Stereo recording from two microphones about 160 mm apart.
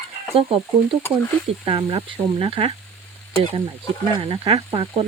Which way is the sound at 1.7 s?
35° right (ahead or behind).